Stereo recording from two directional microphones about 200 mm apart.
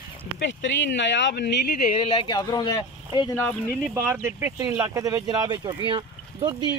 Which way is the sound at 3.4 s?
10° left (ahead or behind).